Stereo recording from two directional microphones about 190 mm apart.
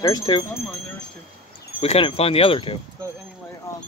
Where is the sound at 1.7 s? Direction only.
30° left (ahead or behind).